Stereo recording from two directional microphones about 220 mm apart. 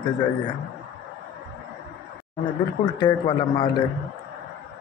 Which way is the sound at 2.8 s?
20° left (ahead or behind).